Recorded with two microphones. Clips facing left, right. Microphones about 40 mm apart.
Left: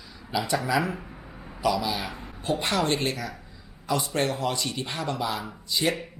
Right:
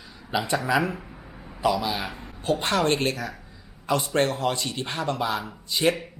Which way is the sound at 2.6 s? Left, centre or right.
Right.